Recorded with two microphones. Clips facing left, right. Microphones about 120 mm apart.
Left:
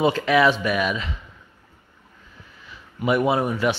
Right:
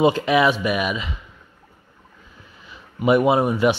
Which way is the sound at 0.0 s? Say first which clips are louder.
Right 1 dB; 20° right (ahead or behind).